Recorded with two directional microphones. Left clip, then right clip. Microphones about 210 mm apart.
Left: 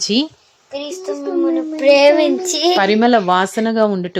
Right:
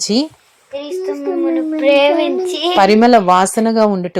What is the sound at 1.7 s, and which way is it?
A child's voice, 10° left (ahead or behind).